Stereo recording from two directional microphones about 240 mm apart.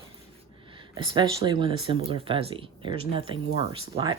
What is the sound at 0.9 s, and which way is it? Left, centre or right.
Speech, centre.